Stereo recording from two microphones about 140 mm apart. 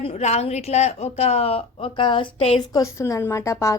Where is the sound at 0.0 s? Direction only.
50° left (ahead or behind).